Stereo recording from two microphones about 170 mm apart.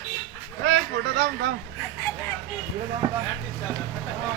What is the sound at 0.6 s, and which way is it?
Speech, 80° right.